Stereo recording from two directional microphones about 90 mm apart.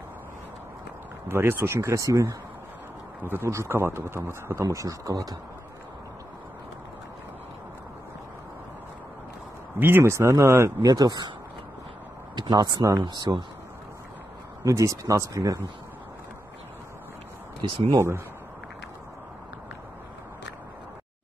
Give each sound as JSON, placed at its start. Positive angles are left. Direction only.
{"t": 1.3, "sound": "speech", "side_deg": -25}
{"t": 9.8, "sound": "speech", "side_deg": -25}
{"t": 10.9, "sound": "speech", "side_deg": -50}
{"t": 12.4, "sound": "speech", "side_deg": -50}
{"t": 14.6, "sound": "speech", "side_deg": -35}
{"t": 17.9, "sound": "speech", "side_deg": -30}